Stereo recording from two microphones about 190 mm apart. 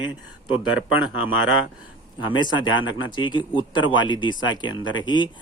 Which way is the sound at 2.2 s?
25° left (ahead or behind).